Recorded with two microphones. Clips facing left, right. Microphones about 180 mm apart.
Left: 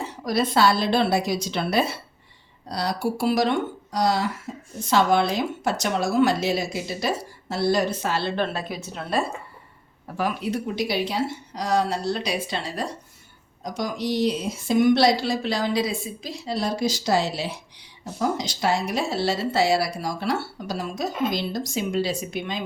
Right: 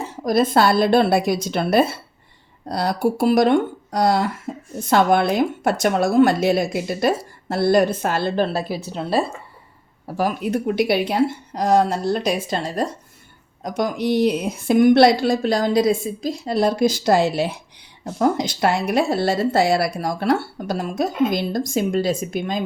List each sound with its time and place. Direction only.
0.3 s a woman's voice: 50° right (ahead or behind)
4.5 s a sound: 55° right (ahead or behind)
4.9 s a woman's voice: 55° right (ahead or behind); by 9.2 s 30° right (ahead or behind)
10.2 s a woman's voice: 45° right (ahead or behind)
13.6 s a woman's voice: 60° right (ahead or behind)